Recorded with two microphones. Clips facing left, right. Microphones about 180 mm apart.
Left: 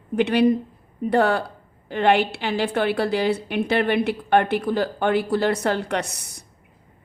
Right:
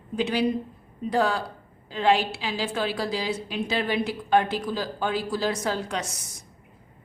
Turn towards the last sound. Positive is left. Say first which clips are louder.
# left 5 dB
turn(degrees=65)  # may be behind; listen again after turning